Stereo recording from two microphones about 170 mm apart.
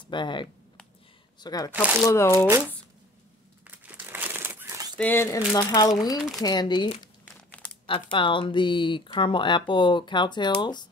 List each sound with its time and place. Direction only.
0.1 s speech: 30° left (ahead or behind)
1.7 s speech: 10° right (ahead or behind)
2.0 s speech: 15° left (ahead or behind)
3.6 s crumpling: 10° right (ahead or behind)
4.9 s speech: 10° left (ahead or behind); by 10.9 s 25° left (ahead or behind)